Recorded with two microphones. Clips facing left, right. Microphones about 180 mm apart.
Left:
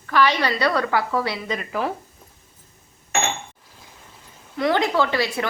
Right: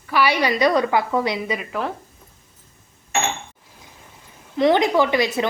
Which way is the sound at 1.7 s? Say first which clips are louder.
Left 1 dB; centre (ahead or behind).